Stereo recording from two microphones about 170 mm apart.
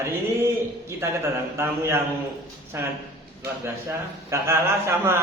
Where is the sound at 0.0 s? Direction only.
15° right (ahead or behind).